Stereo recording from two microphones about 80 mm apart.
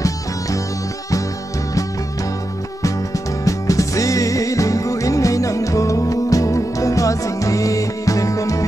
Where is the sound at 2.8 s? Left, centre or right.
Left.